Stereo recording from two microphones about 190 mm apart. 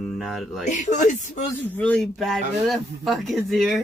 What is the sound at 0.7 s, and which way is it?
Speech, 40° left (ahead or behind).